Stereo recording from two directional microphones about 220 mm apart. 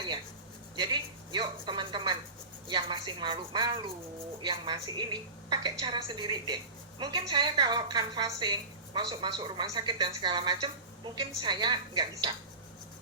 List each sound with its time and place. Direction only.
0.8 s a woman's voice: 20° right (ahead or behind)